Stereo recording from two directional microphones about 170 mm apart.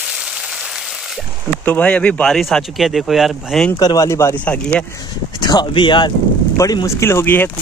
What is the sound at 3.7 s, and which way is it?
Speech, 25° left (ahead or behind).